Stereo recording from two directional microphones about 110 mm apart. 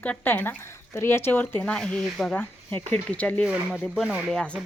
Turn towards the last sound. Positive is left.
turn(degrees=5)  # may be behind; listen again after turning